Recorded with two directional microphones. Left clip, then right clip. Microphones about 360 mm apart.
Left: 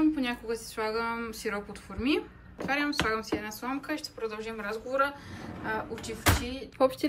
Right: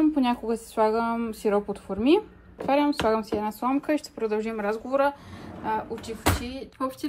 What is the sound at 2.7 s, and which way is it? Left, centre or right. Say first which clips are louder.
Speech: right 6 dB; centre.